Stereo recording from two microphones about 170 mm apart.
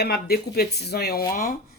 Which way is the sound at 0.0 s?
65° left (ahead or behind).